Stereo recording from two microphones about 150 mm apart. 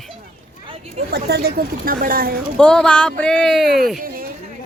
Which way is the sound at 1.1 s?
90° right.